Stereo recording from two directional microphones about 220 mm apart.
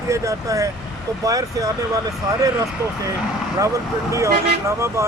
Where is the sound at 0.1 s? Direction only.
15° right (ahead or behind).